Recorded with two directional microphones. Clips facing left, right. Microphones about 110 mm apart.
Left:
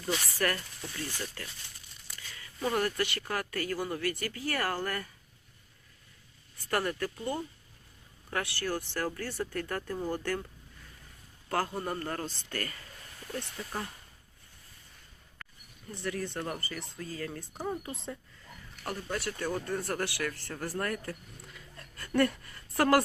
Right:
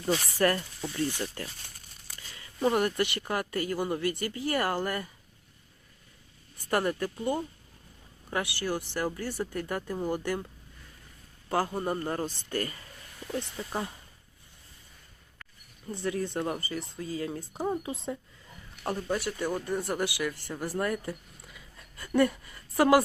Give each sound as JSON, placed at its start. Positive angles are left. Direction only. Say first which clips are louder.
{"t": 0.1, "sound": "speech", "louder": "right 5 dB", "side_deg": -25}
{"t": 6.7, "sound": "speech", "louder": "right 3 dB", "side_deg": -15}
{"t": 11.4, "sound": "speech", "louder": "right 3 dB", "side_deg": -15}
{"t": 15.9, "sound": "speech", "louder": "right 4 dB", "side_deg": -20}
{"t": 21.5, "sound": "a sound", "louder": "left 1 dB", "side_deg": -5}